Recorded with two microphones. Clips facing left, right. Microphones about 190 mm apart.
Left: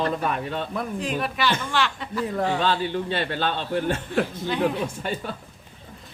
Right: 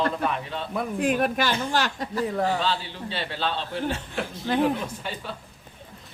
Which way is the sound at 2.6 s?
55° left (ahead or behind).